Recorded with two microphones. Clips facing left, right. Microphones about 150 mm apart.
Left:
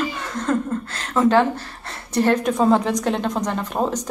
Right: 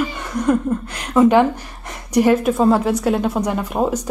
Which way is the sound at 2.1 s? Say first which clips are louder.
Right 4 dB; 10° right (ahead or behind).